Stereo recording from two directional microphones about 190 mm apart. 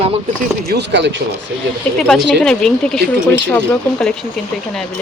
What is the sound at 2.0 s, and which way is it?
Speech, 5° left (ahead or behind).